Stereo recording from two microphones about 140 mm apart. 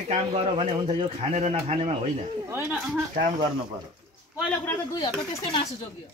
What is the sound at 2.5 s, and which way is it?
Speech, 15° right (ahead or behind).